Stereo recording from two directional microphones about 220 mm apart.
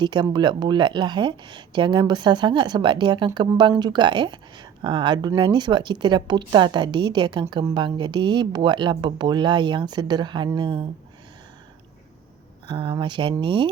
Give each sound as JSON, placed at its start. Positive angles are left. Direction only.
{"t": 0.0, "sound": "speech", "side_deg": -20}
{"t": 12.7, "sound": "speech", "side_deg": -20}